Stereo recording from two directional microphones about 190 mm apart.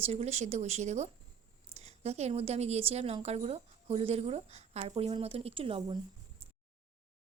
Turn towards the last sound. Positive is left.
turn(degrees=-30)  # may be behind; listen again after turning